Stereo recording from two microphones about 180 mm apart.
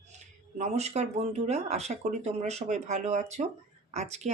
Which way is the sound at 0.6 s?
40° right (ahead or behind).